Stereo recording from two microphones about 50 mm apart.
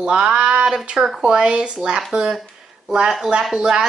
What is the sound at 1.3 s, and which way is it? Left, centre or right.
Speech, centre.